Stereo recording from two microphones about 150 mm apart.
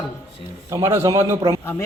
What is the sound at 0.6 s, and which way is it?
Speech, 20° right (ahead or behind).